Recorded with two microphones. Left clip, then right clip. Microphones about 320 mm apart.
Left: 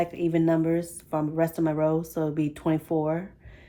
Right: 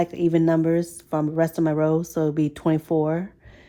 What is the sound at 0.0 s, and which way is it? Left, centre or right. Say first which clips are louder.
Speech: right 4 dB; right.